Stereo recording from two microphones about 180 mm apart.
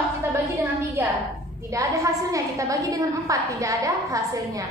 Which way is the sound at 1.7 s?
20° right (ahead or behind).